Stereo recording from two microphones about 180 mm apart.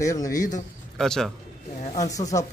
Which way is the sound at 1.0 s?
Centre (ahead or behind).